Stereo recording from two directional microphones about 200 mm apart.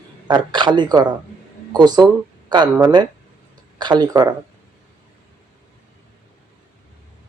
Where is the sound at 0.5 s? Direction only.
20° right (ahead or behind).